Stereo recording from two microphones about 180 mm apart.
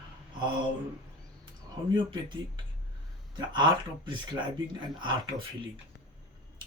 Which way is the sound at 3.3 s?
25° right (ahead or behind).